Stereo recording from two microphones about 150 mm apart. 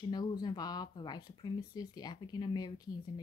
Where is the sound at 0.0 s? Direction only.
30° left (ahead or behind).